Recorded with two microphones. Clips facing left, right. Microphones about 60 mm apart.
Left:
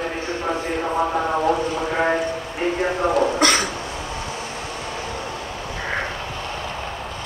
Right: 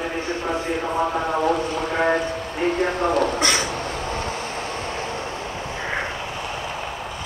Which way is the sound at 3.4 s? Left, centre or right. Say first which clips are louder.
Left 3 dB; left.